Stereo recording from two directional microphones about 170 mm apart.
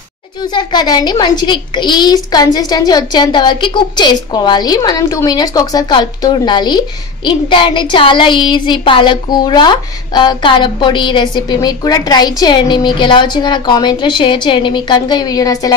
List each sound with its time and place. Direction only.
0.4 s speech: 25° left (ahead or behind)